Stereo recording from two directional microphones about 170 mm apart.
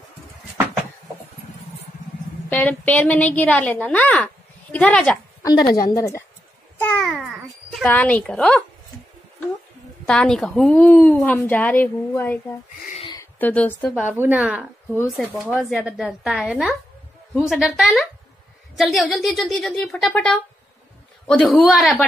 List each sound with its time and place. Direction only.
2.5 s a woman's voice: 10° left (ahead or behind)
5.4 s a woman's voice: 20° left (ahead or behind)
7.0 s babbling: centre (ahead or behind)
7.7 s speech: 10° left (ahead or behind)
10.0 s a woman's voice: 5° left (ahead or behind)
14.1 s speech: 10° right (ahead or behind)